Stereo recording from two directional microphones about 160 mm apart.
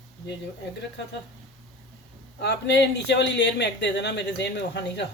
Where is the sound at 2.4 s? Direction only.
90° left.